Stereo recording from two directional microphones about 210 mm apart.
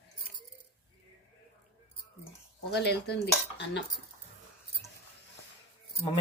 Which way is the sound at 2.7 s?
50° left (ahead or behind).